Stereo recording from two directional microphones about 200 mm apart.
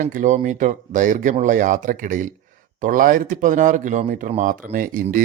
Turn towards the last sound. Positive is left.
turn(degrees=-45)  # may be behind; listen again after turning